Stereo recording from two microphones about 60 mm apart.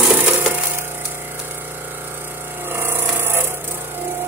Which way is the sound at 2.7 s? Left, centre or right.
Right.